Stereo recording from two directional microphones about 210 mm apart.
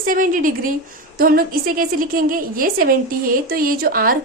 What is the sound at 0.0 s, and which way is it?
A woman's voice, 40° right (ahead or behind).